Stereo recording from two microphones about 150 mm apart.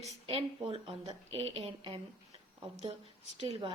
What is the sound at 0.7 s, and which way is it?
A woman's voice, 40° right (ahead or behind).